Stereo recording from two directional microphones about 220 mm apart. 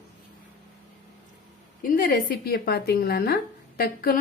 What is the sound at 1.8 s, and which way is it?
A woman's voice, 40° left (ahead or behind).